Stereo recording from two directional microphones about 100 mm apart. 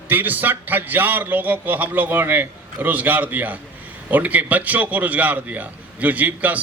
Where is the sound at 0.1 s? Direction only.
20° right (ahead or behind).